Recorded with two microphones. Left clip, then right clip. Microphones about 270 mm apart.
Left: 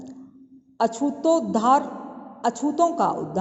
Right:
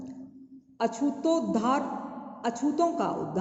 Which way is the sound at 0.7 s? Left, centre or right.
Left.